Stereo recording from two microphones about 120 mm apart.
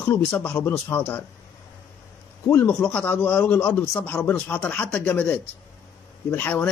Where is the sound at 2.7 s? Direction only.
10° left (ahead or behind).